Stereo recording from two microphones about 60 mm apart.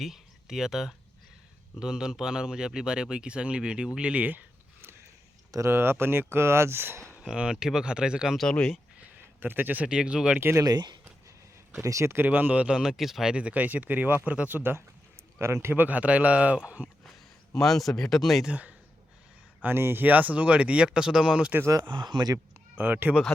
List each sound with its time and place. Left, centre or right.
0.0 s speech: centre; by 4.4 s right
5.5 s speech: right
5.7 s speech: right
7.2 s speech: centre
9.4 s speech: right
9.8 s speech: centre
11.8 s speech: right
12.1 s speech: right; by 13.3 s centre
13.3 s speech: right
15.7 s speech: right
17.5 s speech: centre
19.6 s speech: right; by 21.5 s centre
21.6 s speech: right
22.8 s speech: right